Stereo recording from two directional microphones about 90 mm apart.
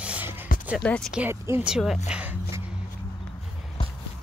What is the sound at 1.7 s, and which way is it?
Speech, 5° right (ahead or behind).